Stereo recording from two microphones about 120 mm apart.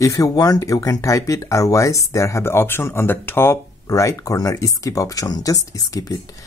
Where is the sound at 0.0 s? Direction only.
30° left (ahead or behind).